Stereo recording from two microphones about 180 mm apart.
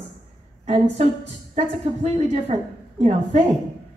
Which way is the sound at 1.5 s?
40° right (ahead or behind).